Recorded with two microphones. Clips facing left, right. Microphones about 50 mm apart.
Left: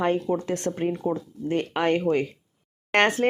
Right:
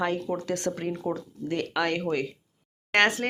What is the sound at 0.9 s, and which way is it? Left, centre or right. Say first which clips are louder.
Speech: left 4 dB; centre.